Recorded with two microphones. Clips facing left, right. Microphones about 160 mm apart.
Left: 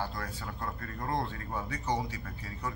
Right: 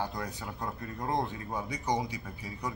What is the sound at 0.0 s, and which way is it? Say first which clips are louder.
Speech: right 2 dB; 15° right (ahead or behind).